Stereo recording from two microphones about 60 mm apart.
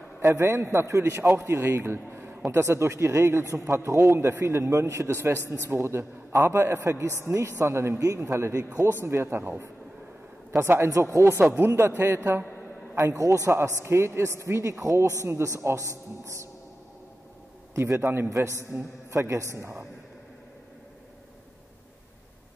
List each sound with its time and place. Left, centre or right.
0.2 s a man's voice: right
1.3 s a man's voice: right
6.8 s a man's voice: right
8.6 s a man's voice: right
9.0 s a man's voice: right
10.9 s speech: right
11.5 s a man's voice: right
12.9 s speech: right
13.5 s a man's voice: right
17.7 s a man's voice: right